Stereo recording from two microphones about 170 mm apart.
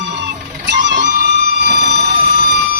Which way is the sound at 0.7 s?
90° right.